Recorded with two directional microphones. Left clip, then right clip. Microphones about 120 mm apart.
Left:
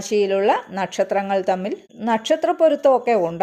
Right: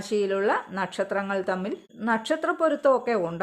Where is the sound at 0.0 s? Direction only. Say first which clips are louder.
Left 7 dB; 15° left (ahead or behind).